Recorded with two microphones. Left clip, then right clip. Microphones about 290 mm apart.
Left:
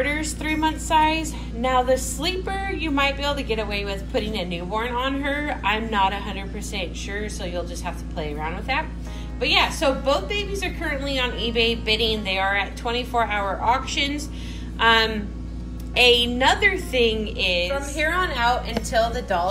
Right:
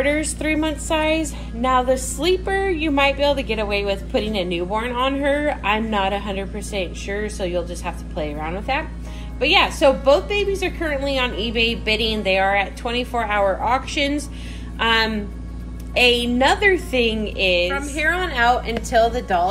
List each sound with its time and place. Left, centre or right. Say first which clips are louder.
0.0 s speech: right 4 dB; left